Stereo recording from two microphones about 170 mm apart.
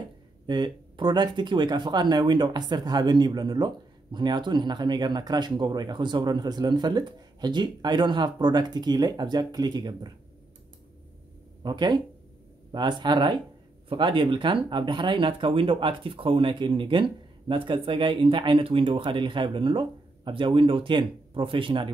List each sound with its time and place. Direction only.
0.5 s speech: 25° right (ahead or behind)
11.6 s speech: 25° right (ahead or behind)